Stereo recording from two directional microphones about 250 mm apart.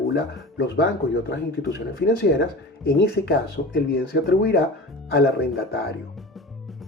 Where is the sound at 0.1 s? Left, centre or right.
Left.